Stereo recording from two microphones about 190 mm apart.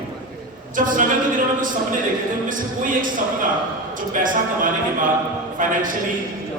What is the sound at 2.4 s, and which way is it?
Speech, 45° right (ahead or behind).